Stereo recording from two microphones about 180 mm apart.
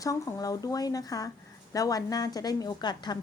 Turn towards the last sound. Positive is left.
turn(degrees=25)  # may be behind; listen again after turning